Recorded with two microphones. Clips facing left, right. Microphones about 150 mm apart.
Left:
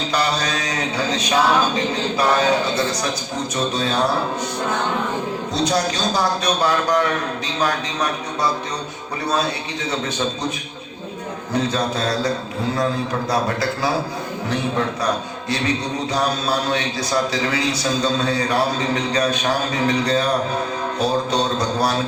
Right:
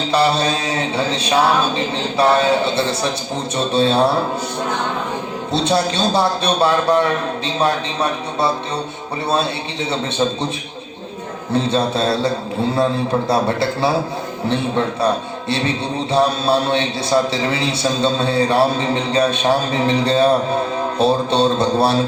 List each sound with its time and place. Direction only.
0.1 s a man's voice: 30° right (ahead or behind)
5.6 s a man's voice: 30° right (ahead or behind)
11.5 s a man's voice: 30° right (ahead or behind)
15.0 s a man's voice: 30° right (ahead or behind)